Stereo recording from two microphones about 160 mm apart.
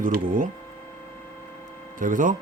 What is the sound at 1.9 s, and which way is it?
Speech, 55° right (ahead or behind).